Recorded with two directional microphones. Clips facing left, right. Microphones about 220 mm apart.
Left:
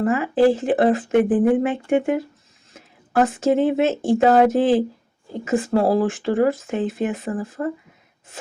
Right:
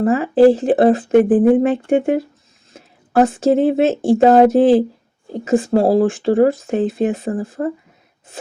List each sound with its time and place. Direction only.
0.0 s speech: 35° right (ahead or behind)